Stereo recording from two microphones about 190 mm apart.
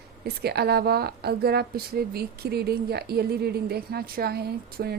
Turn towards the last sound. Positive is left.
turn(degrees=-55)  # may be behind; listen again after turning